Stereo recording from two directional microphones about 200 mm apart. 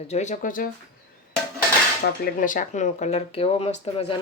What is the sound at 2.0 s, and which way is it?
Speech, 40° left (ahead or behind).